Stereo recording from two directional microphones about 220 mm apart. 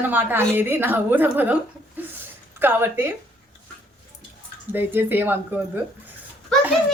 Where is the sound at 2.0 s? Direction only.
10° right (ahead or behind).